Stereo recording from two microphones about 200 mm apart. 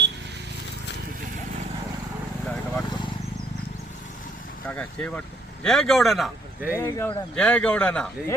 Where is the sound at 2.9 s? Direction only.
25° left (ahead or behind).